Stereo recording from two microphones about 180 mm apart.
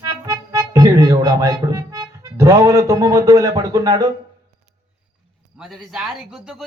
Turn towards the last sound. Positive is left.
turn(degrees=-5)  # may be behind; listen again after turning